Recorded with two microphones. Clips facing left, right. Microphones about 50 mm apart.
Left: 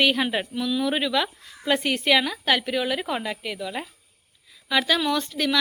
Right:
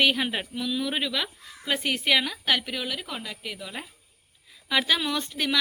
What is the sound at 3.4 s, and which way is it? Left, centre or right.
Speech, centre.